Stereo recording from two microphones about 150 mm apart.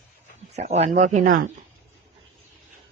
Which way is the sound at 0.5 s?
45° right (ahead or behind).